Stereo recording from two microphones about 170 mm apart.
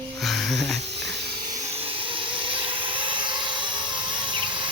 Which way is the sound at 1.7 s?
35° right (ahead or behind).